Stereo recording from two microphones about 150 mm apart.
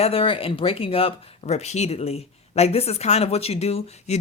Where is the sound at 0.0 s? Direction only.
40° left (ahead or behind).